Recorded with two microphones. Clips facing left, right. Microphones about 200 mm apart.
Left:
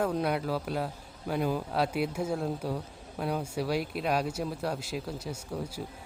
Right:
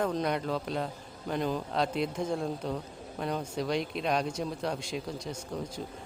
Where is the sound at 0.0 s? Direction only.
5° left (ahead or behind).